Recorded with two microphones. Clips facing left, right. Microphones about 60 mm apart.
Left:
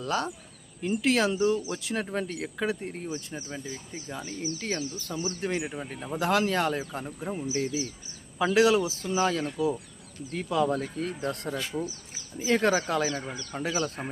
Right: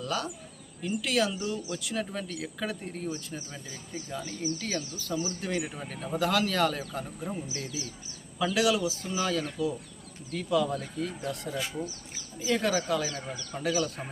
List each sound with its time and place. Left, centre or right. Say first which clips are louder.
0.0 s speech: left 3 dB; left